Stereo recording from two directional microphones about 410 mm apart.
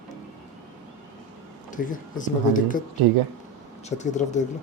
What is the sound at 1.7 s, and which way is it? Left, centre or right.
Speech, centre.